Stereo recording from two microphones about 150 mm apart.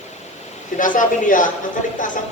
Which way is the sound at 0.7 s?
60° left (ahead or behind).